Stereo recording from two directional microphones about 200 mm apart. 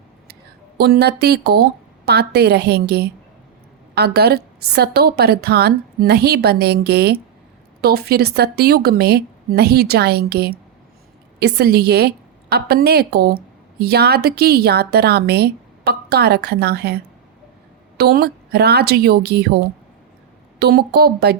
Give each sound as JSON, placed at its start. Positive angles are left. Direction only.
{"t": 0.8, "sound": "a woman's voice", "side_deg": -55}